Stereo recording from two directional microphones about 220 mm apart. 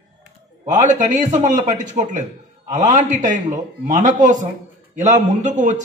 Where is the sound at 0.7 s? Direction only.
35° right (ahead or behind).